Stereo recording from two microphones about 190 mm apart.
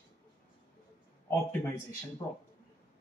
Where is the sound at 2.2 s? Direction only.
20° left (ahead or behind).